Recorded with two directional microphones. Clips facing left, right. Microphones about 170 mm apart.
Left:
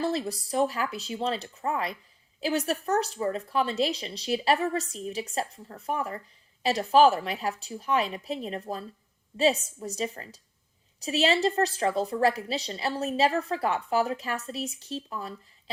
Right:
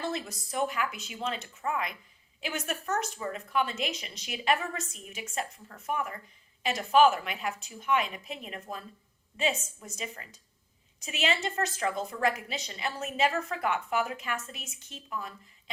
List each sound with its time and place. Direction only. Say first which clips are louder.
0.0 s a woman's voice: left 6 dB; 35° left (ahead or behind)